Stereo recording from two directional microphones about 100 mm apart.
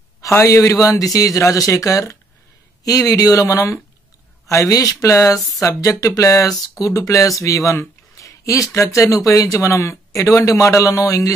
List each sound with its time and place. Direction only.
0.2 s speech: 30° left (ahead or behind)
8.2 s a sound: 30° left (ahead or behind)
8.7 s speech: 30° left (ahead or behind)